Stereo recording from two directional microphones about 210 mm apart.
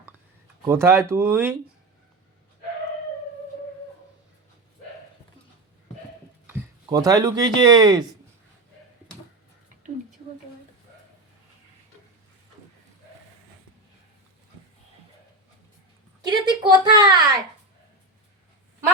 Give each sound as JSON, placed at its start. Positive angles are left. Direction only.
{"t": 0.6, "sound": "speech", "side_deg": -10}
{"t": 6.8, "sound": "speech", "side_deg": -15}
{"t": 16.2, "sound": "a sound", "side_deg": -20}